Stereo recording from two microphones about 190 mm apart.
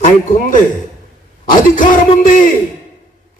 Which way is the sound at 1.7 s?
45° left (ahead or behind).